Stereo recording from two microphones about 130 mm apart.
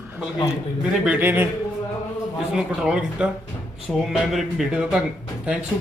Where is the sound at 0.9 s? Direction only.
10° right (ahead or behind).